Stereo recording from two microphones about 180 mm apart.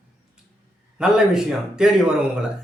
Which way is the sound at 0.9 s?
5° right (ahead or behind).